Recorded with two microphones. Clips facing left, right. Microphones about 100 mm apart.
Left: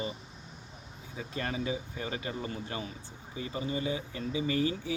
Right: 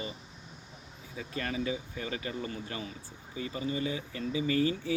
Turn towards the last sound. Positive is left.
turn(degrees=20)  # may be behind; listen again after turning